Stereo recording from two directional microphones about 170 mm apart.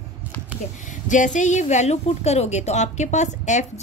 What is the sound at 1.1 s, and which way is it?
A woman's voice, 45° left (ahead or behind).